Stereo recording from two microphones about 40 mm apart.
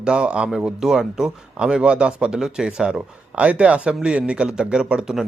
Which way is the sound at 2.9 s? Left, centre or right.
Right.